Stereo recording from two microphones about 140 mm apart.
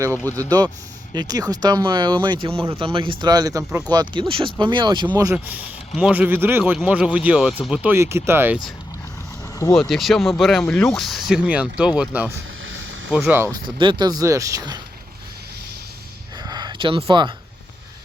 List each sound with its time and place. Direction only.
0.3 s speech: 10° left (ahead or behind)
1.1 s speech: 30° right (ahead or behind)
6.0 s speech: 10° right (ahead or behind)
7.9 s speech: 20° right (ahead or behind)
9.7 s speech: 5° left (ahead or behind)
10.6 s speech: 15° left (ahead or behind); by 13.3 s 5° right (ahead or behind)
13.5 s speech: 35° right (ahead or behind)
16.4 s a sound: 30° right (ahead or behind)